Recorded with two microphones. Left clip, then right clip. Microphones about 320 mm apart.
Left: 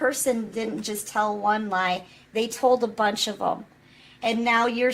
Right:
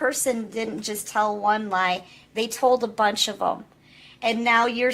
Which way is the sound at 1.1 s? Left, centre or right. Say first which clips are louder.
Right 2 dB; right.